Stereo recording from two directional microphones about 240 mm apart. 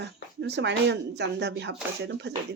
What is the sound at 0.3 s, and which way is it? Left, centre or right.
Speech, right.